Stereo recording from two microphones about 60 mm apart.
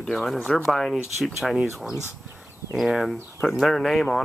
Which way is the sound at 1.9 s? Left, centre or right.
Left.